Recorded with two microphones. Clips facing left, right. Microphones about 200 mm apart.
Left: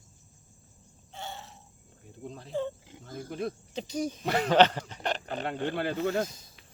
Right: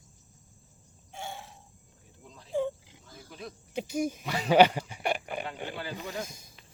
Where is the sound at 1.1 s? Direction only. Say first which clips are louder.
Right 1 dB; 10° right (ahead or behind).